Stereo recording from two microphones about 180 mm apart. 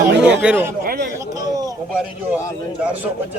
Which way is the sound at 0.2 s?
10° right (ahead or behind).